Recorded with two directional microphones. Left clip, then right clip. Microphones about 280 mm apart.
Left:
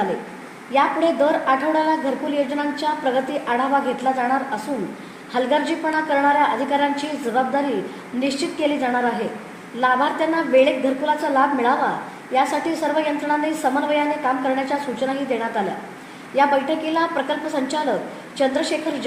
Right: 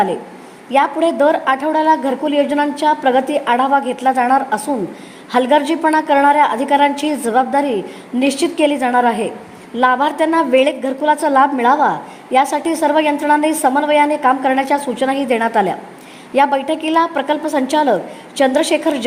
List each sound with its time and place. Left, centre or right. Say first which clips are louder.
0.7 s a woman's voice: right 4 dB; right